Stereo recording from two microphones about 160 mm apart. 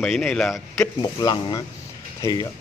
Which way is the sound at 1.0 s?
25° left (ahead or behind).